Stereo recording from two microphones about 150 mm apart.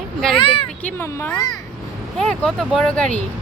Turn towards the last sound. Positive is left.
turn(degrees=5)  # may be behind; listen again after turning